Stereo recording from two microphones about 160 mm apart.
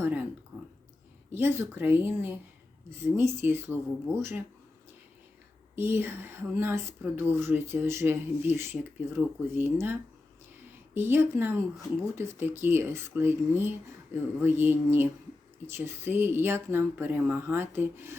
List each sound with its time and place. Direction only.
0.0 s a sound: 10° right (ahead or behind)
1.3 s speech: 15° right (ahead or behind)
5.7 s speech: 15° right (ahead or behind)